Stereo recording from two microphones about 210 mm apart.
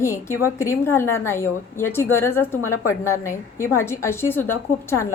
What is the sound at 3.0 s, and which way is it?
A woman's voice, 15° left (ahead or behind).